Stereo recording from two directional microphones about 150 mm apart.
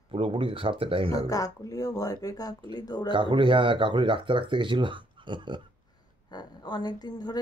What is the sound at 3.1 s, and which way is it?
Speech, 30° right (ahead or behind).